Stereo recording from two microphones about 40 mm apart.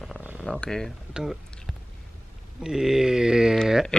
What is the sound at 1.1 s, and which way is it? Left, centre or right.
Speech, right.